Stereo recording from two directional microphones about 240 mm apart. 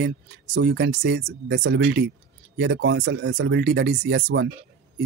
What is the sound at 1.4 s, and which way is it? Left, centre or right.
Speech, right.